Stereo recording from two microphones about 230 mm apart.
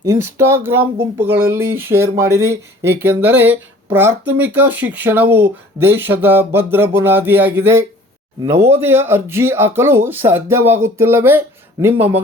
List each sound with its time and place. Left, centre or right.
0.0 s speech: centre